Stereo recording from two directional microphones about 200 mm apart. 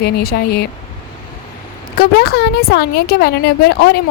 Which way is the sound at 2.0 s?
50° left (ahead or behind).